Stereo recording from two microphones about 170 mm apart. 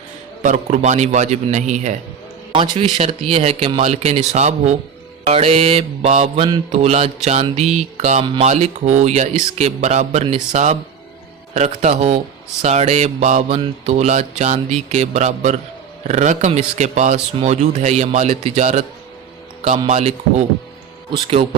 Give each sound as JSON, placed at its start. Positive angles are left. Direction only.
{"t": 0.4, "sound": "a man's voice", "side_deg": -45}
{"t": 2.5, "sound": "a man's voice", "side_deg": -35}
{"t": 19.9, "sound": "speech", "side_deg": -40}